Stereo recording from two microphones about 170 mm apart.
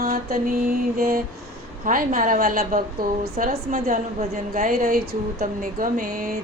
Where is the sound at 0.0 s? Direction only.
60° right (ahead or behind).